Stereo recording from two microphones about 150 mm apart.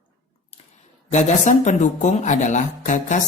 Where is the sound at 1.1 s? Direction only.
50° left (ahead or behind).